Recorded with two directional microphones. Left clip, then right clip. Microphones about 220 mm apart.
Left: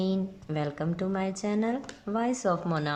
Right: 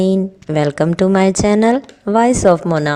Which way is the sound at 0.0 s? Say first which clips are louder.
Right 15 dB; 35° right (ahead or behind).